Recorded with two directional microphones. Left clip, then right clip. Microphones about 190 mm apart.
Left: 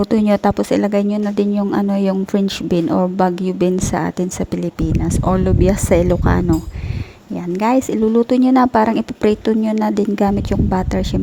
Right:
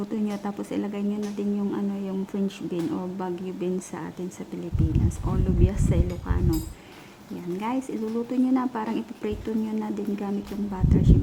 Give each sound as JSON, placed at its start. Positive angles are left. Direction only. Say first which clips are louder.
{"t": 0.0, "sound": "speech", "louder": "left 16 dB", "side_deg": 45}
{"t": 7.6, "sound": "speech", "louder": "left 15 dB", "side_deg": 40}